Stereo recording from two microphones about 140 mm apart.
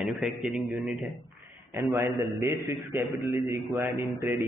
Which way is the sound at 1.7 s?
20° right (ahead or behind).